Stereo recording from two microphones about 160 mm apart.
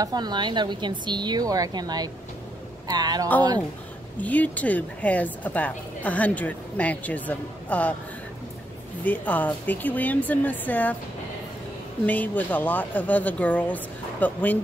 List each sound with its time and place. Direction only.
0.0 s a woman's voice: 25° right (ahead or behind)
4.2 s a woman's voice: 10° left (ahead or behind)
9.0 s a woman's voice: 10° left (ahead or behind)
12.1 s a woman's voice: 10° left (ahead or behind)